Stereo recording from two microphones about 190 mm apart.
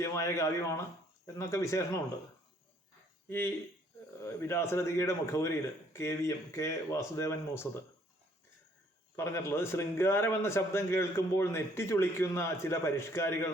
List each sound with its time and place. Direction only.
0.0 s a man's voice: 15° left (ahead or behind)
3.2 s a man's voice: 10° left (ahead or behind)
9.1 s a man's voice: 10° left (ahead or behind)